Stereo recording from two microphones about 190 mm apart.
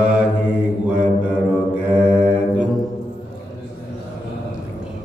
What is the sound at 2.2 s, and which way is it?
Music, 5° right (ahead or behind).